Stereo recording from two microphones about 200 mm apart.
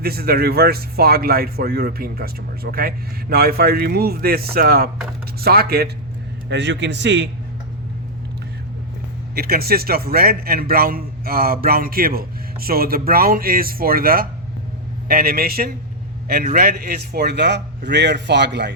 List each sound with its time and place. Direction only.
0.0 s a man's voice: 50° right (ahead or behind)
6.5 s a man's voice: 60° right (ahead or behind)
9.3 s a man's voice: 50° right (ahead or behind)